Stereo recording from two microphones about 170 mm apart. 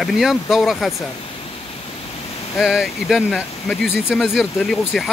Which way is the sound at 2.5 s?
Centre (ahead or behind).